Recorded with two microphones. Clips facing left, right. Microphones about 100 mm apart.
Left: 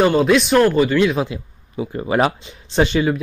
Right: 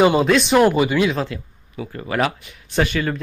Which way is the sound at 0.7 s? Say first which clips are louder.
Left 1 dB; 15° right (ahead or behind).